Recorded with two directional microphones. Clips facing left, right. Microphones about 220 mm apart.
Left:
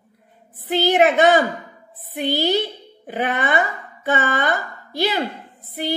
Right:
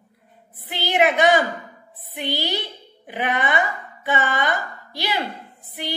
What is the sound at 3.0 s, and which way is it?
A woman's voice, 45° left (ahead or behind).